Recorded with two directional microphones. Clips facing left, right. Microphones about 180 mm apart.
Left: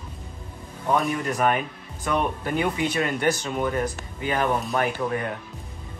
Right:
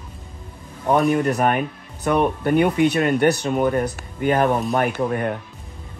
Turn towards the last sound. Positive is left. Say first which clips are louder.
# right 4 dB
turn(degrees=-45)  # may be behind; listen again after turning